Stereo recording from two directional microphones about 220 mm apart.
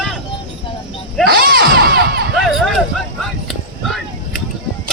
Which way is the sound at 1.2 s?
45° right (ahead or behind).